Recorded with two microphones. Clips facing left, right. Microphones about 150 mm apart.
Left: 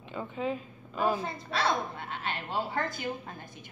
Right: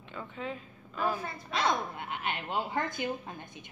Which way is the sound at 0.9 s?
15° left (ahead or behind).